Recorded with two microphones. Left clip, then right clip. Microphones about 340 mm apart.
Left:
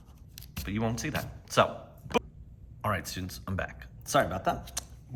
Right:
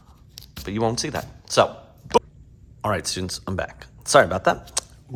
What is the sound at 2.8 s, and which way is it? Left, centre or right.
Speech, centre.